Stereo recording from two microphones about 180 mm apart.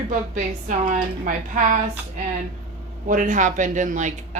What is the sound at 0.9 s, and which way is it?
Speech, 50° right (ahead or behind).